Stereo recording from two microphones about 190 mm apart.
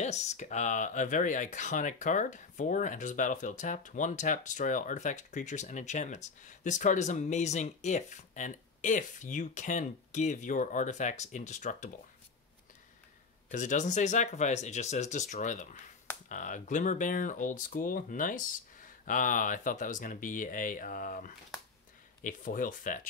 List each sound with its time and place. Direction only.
0.0 s speech: 35° left (ahead or behind)
13.5 s speech: 40° left (ahead or behind)